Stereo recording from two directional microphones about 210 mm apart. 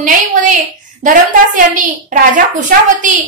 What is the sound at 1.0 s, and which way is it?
A woman's voice, 40° right (ahead or behind).